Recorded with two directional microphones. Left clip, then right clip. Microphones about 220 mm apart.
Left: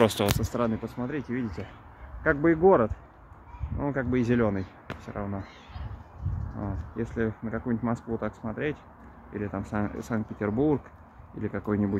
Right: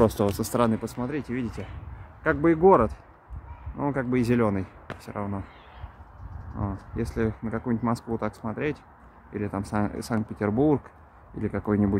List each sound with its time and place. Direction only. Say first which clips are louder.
0.0 s speech: right 1 dB; 35° right (ahead or behind)
0.4 s speech: right 4 dB; 50° right (ahead or behind)
0.9 s a man's voice: right 2 dB; 25° right (ahead or behind)
6.6 s speech: right 2 dB; 20° right (ahead or behind)